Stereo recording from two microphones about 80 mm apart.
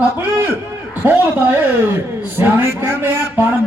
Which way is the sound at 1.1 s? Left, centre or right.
Right.